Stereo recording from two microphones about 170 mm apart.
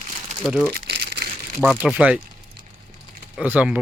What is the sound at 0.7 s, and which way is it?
Crumpling, 75° right (ahead or behind).